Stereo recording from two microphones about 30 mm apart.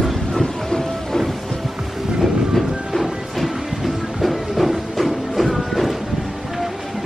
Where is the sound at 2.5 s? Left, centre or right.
Centre.